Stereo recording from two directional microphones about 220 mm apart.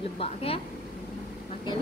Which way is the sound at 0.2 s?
25° left (ahead or behind).